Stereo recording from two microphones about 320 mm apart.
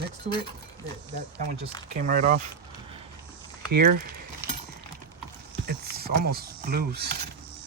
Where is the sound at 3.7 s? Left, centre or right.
Right.